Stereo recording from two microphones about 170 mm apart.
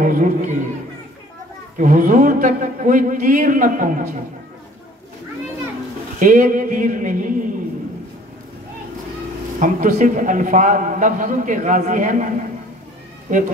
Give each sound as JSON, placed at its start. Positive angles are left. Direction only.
{"t": 0.0, "sound": "a man's voice", "side_deg": -50}
{"t": 1.8, "sound": "a man's voice", "side_deg": -50}
{"t": 6.1, "sound": "a man's voice", "side_deg": -50}
{"t": 9.6, "sound": "a man's voice", "side_deg": -50}
{"t": 13.3, "sound": "a man's voice", "side_deg": -50}